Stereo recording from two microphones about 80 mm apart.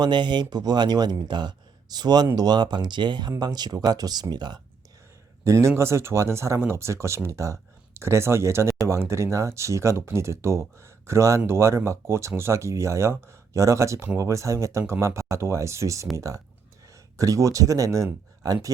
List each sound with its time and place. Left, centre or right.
0.0 s speech: right
3.3 s speech: right
5.5 s speech: right